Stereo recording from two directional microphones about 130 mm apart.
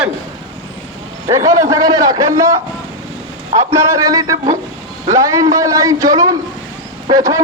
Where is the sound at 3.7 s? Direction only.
25° right (ahead or behind).